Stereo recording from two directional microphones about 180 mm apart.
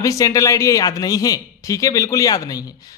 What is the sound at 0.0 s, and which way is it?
Speech, 20° left (ahead or behind).